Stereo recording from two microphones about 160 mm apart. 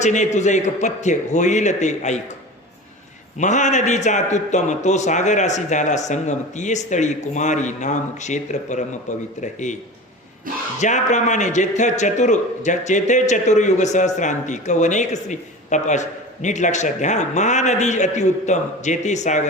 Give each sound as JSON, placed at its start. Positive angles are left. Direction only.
{"t": 0.0, "sound": "a man's voice", "side_deg": 45}
{"t": 3.3, "sound": "a man's voice", "side_deg": 50}
{"t": 10.8, "sound": "a man's voice", "side_deg": 50}